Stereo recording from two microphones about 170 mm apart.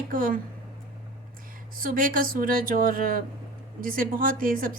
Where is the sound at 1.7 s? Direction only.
55° right (ahead or behind).